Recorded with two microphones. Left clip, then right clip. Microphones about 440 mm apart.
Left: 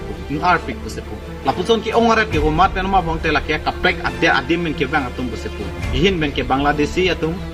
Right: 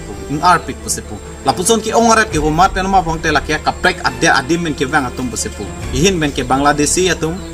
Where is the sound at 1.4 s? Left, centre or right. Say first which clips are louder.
Right 3 dB; left.